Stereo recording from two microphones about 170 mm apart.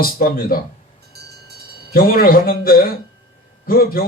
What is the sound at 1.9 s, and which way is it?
A man's voice, 60° left (ahead or behind).